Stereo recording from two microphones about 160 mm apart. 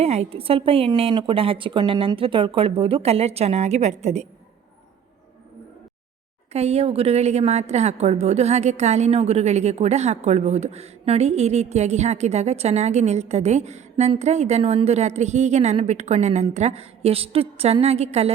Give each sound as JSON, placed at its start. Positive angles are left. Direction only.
{"t": 0.0, "sound": "a woman's voice", "side_deg": -40}
{"t": 6.5, "sound": "a woman's voice", "side_deg": -40}